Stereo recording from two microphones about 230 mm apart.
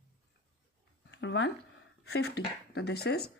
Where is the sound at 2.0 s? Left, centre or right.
Left.